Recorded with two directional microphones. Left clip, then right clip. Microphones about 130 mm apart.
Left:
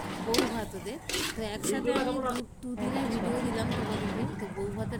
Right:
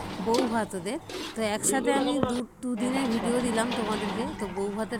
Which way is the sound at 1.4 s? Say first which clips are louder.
Right 5 dB; 40° right (ahead or behind).